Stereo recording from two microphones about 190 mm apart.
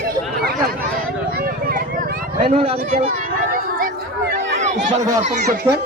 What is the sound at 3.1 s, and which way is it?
Children playing, 45° right (ahead or behind).